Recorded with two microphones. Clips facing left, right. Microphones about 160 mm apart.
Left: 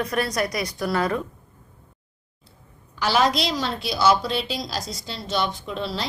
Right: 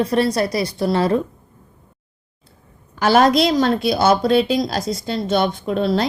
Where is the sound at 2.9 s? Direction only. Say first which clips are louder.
Right 7 dB; 50° right (ahead or behind).